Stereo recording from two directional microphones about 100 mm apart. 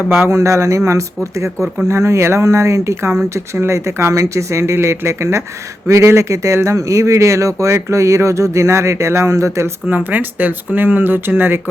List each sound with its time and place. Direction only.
0.2 s speech: 25° right (ahead or behind)
9.8 s speech: 15° right (ahead or behind)